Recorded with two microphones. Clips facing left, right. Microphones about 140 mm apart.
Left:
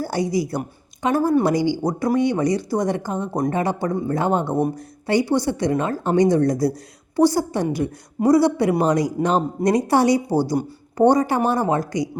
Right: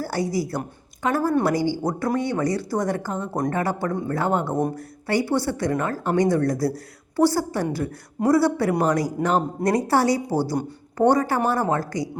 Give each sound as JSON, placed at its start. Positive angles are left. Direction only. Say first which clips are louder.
{"t": 0.0, "sound": "a woman's voice", "louder": "left 3 dB", "side_deg": 15}
{"t": 4.5, "sound": "a woman's voice", "louder": "left 3 dB", "side_deg": 5}
{"t": 4.8, "sound": "a woman's voice", "louder": "left 3 dB", "side_deg": 20}